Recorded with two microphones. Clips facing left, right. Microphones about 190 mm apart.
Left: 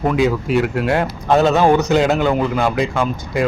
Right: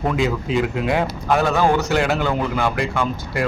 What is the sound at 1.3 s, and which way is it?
A man's voice, 20° left (ahead or behind).